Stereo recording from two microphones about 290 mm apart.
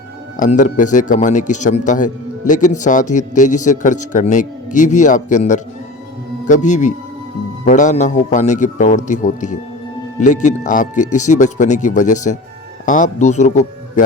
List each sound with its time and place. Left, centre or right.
0.3 s speech: left